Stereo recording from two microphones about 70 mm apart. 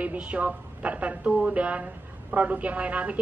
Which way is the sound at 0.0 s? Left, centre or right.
Right.